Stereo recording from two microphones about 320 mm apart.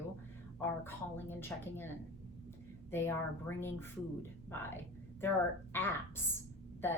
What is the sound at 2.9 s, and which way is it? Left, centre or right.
A woman's voice, centre.